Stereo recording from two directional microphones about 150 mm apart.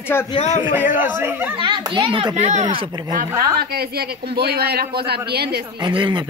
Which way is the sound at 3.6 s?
90° right.